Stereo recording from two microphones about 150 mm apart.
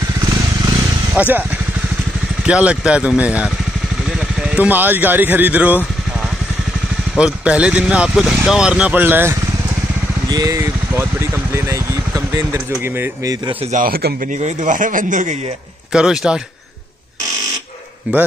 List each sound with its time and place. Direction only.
1.1 s speech: 10° right (ahead or behind)
2.4 s speech: 5° right (ahead or behind)
7.2 s speech: 10° right (ahead or behind)
10.3 s speech: 25° right (ahead or behind)
13.7 s speech: 70° right (ahead or behind)
14.4 s speech: 55° right (ahead or behind)
15.9 s speech: 5° right (ahead or behind)
18.1 s speech: 10° right (ahead or behind)